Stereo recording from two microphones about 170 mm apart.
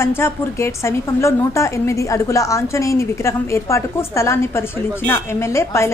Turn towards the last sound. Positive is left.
turn(degrees=15)  # may be behind; listen again after turning